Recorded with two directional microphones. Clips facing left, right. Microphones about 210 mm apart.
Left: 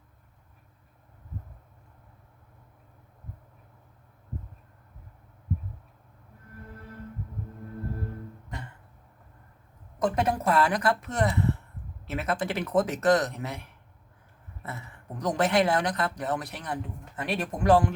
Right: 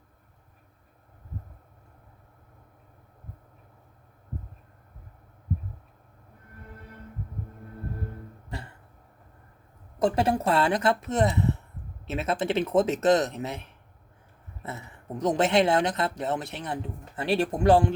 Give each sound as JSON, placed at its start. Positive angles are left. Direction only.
{"t": 10.0, "sound": "speech", "side_deg": -30}